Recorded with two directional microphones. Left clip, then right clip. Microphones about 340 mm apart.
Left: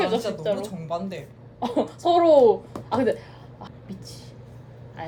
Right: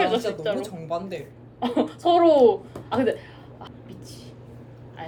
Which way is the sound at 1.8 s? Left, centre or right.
Left.